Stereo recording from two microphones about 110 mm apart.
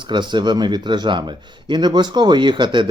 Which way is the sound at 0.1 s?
45° right (ahead or behind).